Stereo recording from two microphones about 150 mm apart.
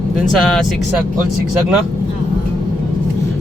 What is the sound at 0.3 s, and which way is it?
Speech, 5° left (ahead or behind).